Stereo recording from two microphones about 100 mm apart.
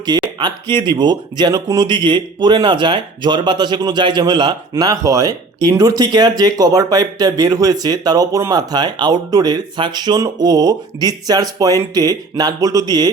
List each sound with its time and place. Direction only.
0.0 s speech: 45° right (ahead or behind)